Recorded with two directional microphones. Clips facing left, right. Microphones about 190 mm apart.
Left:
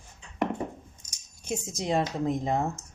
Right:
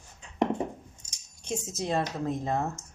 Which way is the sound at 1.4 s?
10° left (ahead or behind).